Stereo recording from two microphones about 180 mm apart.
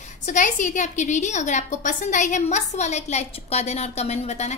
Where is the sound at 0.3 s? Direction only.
45° left (ahead or behind).